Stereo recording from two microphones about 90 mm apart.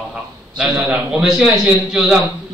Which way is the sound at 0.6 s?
10° right (ahead or behind).